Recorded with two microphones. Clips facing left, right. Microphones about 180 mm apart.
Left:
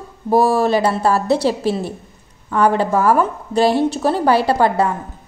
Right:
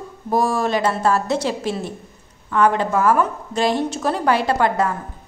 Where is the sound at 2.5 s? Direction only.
35° left (ahead or behind).